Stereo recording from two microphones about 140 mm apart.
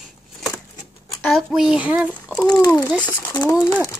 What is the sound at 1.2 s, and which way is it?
Speech, centre (ahead or behind).